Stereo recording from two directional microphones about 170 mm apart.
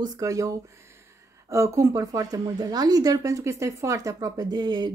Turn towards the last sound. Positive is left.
turn(degrees=-25)  # may be behind; listen again after turning